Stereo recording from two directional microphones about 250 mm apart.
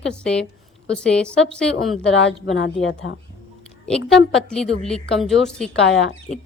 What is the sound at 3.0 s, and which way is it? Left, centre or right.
Speech, left.